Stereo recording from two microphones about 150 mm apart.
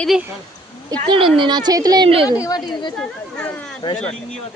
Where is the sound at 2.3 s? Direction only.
25° left (ahead or behind).